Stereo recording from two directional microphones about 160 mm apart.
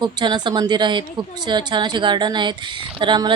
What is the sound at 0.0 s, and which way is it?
A woman's voice, 25° right (ahead or behind).